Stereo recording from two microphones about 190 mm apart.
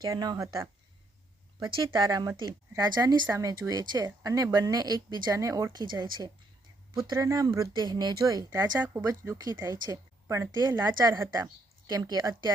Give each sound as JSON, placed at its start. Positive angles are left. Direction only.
{"t": 0.0, "sound": "speech", "side_deg": -20}